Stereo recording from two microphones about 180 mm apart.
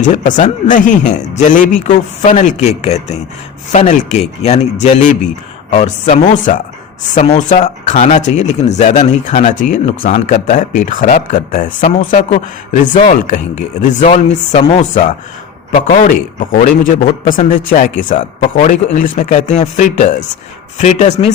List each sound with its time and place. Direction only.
0.0 s a man's voice: 45° left (ahead or behind)